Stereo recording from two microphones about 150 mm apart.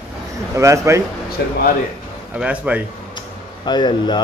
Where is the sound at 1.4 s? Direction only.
90° left.